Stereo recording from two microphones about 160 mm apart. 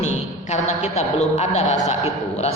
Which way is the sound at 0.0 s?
45° left (ahead or behind).